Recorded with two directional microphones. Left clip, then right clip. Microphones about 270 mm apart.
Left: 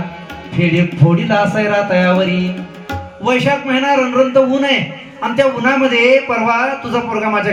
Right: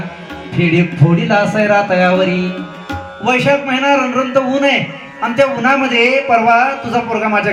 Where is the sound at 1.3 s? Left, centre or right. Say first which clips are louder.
Right 3 dB; right.